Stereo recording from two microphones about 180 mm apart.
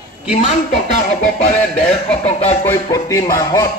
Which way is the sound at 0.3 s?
40° left (ahead or behind).